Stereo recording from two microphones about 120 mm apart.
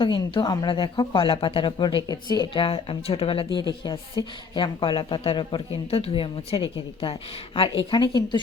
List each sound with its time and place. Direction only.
0.0 s speech: 40° left (ahead or behind)
2.0 s speech: 35° left (ahead or behind)